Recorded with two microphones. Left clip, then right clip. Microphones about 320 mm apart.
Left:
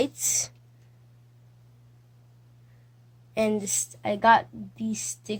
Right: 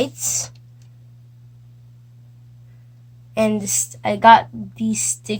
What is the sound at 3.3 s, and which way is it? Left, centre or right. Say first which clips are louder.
A woman's voice: right 6 dB; left.